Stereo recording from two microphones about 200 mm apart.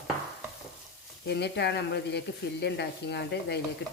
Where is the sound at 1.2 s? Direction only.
55° left (ahead or behind).